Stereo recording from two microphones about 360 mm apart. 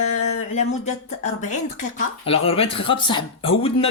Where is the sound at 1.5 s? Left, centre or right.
Centre.